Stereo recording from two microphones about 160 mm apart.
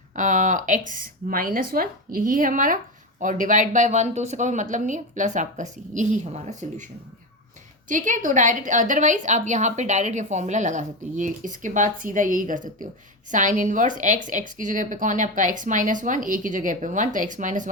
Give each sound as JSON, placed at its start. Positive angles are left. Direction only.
{"t": 0.2, "sound": "a woman's voice", "side_deg": -55}
{"t": 7.9, "sound": "a woman's voice", "side_deg": -55}